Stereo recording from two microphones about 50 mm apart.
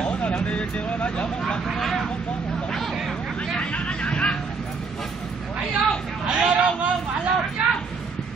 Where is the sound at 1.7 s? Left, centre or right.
Centre.